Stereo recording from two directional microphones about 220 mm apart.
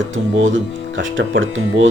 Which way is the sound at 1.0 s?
60° right (ahead or behind).